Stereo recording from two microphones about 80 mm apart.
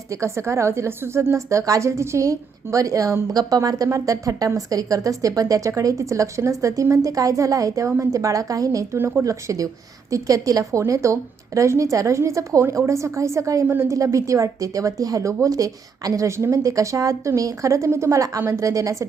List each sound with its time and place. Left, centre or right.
0.2 s a woman's voice: right
3.3 s a woman's voice: right